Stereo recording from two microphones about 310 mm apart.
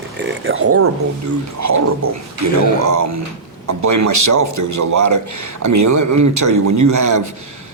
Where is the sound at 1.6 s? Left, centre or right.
Right.